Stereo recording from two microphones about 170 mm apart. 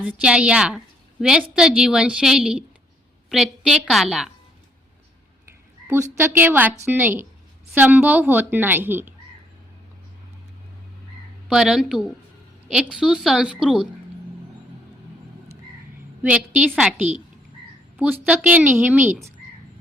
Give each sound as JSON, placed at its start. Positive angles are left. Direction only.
{"t": 0.0, "sound": "a woman's voice", "side_deg": -5}
{"t": 5.9, "sound": "a woman's voice", "side_deg": -15}
{"t": 11.4, "sound": "a woman's voice", "side_deg": -5}
{"t": 16.2, "sound": "a woman's voice", "side_deg": -10}